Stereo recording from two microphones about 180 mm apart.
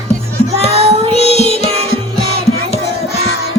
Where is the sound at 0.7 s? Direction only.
35° right (ahead or behind).